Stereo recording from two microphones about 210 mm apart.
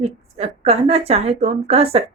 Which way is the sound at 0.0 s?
30° right (ahead or behind).